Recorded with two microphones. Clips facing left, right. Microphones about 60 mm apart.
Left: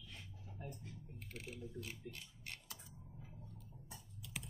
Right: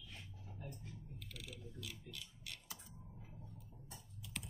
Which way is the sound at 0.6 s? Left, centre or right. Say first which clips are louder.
Left 2 dB; left.